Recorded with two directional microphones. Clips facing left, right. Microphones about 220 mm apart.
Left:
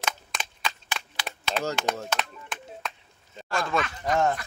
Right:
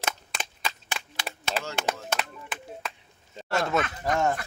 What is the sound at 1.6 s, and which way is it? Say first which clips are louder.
Speech: left 6 dB; centre (ahead or behind).